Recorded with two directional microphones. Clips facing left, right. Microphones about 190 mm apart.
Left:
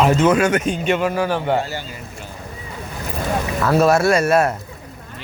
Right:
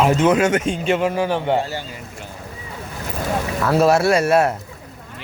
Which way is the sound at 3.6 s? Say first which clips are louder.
Even; 10° right (ahead or behind).